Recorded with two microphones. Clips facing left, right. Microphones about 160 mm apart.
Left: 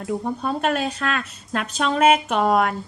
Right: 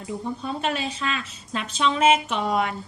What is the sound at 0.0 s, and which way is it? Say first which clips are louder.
A woman's voice: left 5 dB; 55° left (ahead or behind).